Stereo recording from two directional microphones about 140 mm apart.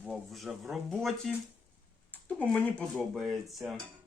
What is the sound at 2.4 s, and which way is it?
Speech, 5° left (ahead or behind).